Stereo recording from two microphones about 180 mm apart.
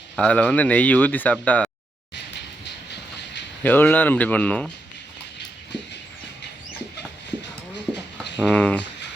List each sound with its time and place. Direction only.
0.2 s speech: 5° left (ahead or behind)
2.6 s train: 70° left (ahead or behind)
3.6 s speech: 10° left (ahead or behind)
8.2 s speech: centre (ahead or behind)